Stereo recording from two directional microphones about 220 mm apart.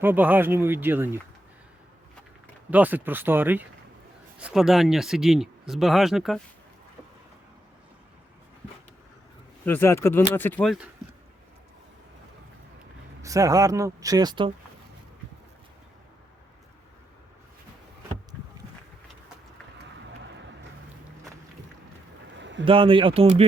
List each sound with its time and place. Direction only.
0.0 s speech: 10° right (ahead or behind)
2.6 s speech: 5° right (ahead or behind)
9.6 s speech: 10° left (ahead or behind)
13.2 s speech: 15° right (ahead or behind)
22.4 s a sound: 55° right (ahead or behind)
22.6 s speech: 25° right (ahead or behind)